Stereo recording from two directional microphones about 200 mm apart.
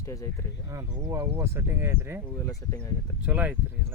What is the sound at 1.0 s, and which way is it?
Speech, 15° right (ahead or behind).